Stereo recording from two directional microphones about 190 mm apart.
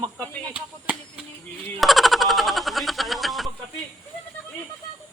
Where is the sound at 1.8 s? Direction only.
Centre (ahead or behind).